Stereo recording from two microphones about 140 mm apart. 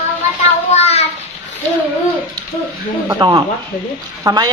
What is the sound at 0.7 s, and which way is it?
Speech, 50° left (ahead or behind).